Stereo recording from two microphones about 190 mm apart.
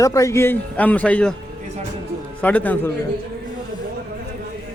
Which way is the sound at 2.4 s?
10° left (ahead or behind).